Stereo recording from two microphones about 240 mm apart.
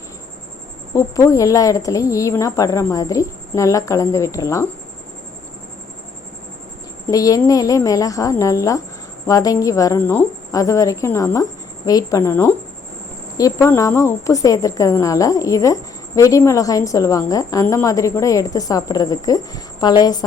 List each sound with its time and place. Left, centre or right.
0.9 s a woman's voice: centre
7.1 s a woman's voice: centre